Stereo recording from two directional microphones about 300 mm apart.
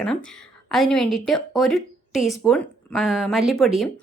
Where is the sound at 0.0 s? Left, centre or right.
Centre.